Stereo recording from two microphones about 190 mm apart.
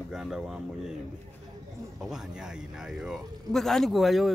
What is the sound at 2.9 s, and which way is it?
Speech, centre (ahead or behind).